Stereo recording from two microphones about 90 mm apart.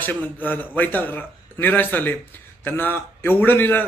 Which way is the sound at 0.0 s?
20° left (ahead or behind).